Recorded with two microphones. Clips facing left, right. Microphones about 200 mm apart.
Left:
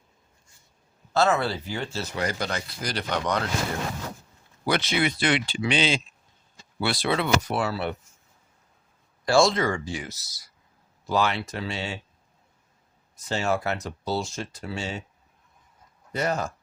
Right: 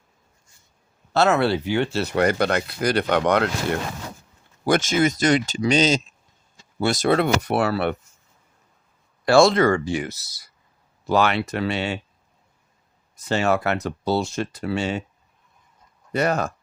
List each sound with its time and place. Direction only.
1.1 s speech: 70° right (ahead or behind)
4.6 s speech: 45° right (ahead or behind); by 7.9 s 60° right (ahead or behind)
9.2 s speech: 65° right (ahead or behind)
13.1 s speech: 65° right (ahead or behind)
16.1 s speech: 65° right (ahead or behind)